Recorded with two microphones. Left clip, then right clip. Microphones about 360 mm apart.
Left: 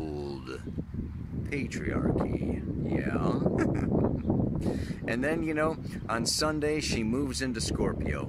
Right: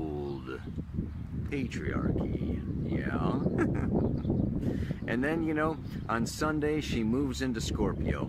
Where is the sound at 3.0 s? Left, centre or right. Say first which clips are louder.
Left 1 dB; centre.